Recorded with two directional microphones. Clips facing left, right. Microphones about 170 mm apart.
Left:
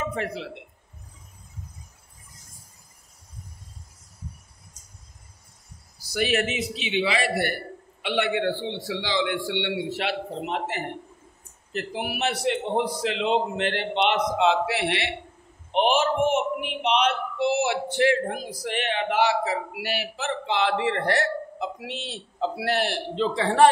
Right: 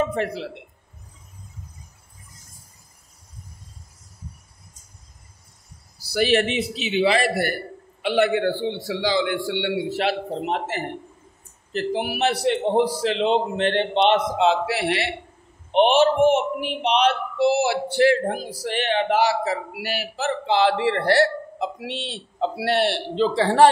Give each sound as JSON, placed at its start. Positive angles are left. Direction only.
{"t": 0.1, "sound": "speech", "side_deg": -35}
{"t": 6.0, "sound": "a man's voice", "side_deg": -35}
{"t": 16.8, "sound": "a man's voice", "side_deg": -35}